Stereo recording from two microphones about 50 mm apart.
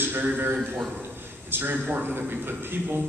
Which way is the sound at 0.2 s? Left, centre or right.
Right.